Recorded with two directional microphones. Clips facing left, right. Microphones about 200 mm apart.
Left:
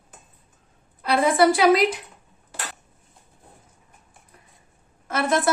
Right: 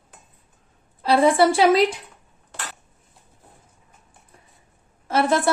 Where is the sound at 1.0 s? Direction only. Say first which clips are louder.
Right 2 dB; 30° right (ahead or behind).